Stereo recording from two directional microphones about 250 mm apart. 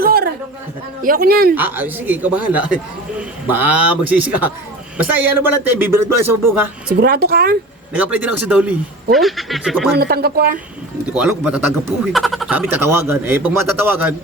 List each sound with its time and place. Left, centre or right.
0.0 s a sound: right
1.0 s speech: right
1.5 s speech: centre
6.8 s speech: right
7.9 s speech: centre
9.9 s speech: right
11.1 s speech: centre